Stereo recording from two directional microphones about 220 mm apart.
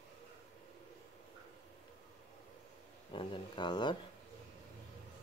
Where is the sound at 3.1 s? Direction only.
25° left (ahead or behind).